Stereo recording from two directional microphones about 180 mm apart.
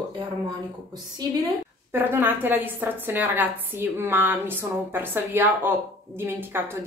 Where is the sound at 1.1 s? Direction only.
15° right (ahead or behind).